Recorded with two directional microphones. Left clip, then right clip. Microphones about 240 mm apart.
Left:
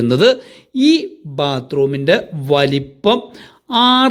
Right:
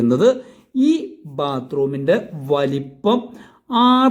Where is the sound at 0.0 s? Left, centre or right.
Centre.